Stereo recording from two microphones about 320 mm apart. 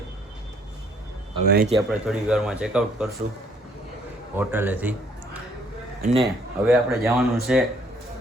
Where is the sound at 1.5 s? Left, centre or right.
Right.